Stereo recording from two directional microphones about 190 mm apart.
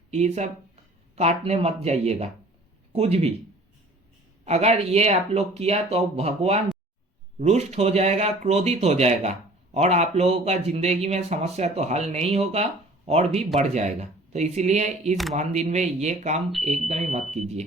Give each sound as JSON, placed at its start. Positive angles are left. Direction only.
{"t": 0.1, "sound": "speech", "side_deg": -35}
{"t": 4.4, "sound": "speech", "side_deg": -35}
{"t": 15.1, "sound": "speech", "side_deg": 0}
{"t": 15.4, "sound": "speech", "side_deg": -35}